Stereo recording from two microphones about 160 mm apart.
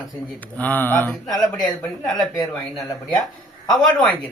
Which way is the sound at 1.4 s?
Centre (ahead or behind).